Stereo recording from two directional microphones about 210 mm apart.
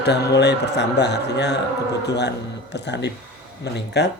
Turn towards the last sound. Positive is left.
turn(degrees=55)  # may be behind; listen again after turning